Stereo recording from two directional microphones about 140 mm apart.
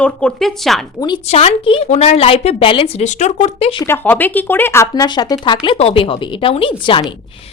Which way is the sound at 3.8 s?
15° left (ahead or behind).